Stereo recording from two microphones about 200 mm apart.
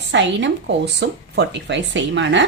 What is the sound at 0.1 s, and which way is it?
Speech, 65° right (ahead or behind).